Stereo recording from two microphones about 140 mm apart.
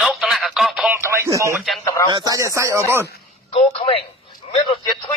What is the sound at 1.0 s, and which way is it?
Speech, 20° right (ahead or behind).